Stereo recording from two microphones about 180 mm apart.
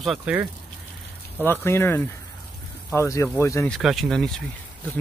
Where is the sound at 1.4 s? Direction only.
10° left (ahead or behind).